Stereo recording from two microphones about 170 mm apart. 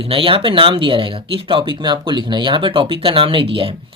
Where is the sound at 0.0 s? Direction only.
30° right (ahead or behind).